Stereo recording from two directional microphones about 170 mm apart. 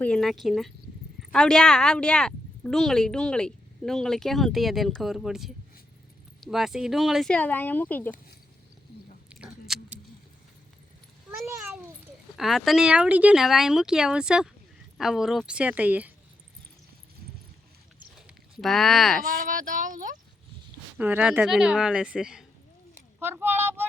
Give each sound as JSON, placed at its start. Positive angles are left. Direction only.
{"t": 0.0, "sound": "speech", "side_deg": 5}
{"t": 9.3, "sound": "biting", "side_deg": -5}
{"t": 12.4, "sound": "speech", "side_deg": 0}
{"t": 18.3, "sound": "speech", "side_deg": 0}
{"t": 19.5, "sound": "speech", "side_deg": -50}
{"t": 21.0, "sound": "speech", "side_deg": -10}